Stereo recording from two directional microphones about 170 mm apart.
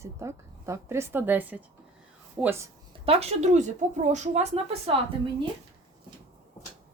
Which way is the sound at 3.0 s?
35° right (ahead or behind).